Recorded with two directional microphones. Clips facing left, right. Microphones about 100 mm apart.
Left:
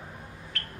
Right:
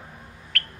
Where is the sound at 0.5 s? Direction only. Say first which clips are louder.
Right 7 dB; 65° right (ahead or behind).